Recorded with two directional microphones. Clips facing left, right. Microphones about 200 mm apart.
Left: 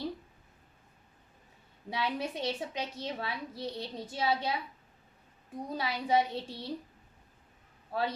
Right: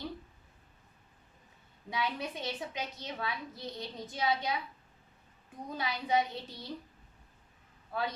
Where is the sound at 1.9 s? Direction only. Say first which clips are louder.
Left 2 dB; 30° left (ahead or behind).